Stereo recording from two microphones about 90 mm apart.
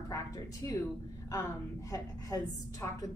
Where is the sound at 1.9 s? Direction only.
35° left (ahead or behind).